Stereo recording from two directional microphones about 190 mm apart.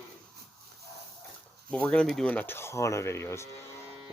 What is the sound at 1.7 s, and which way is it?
Speech, 5° left (ahead or behind).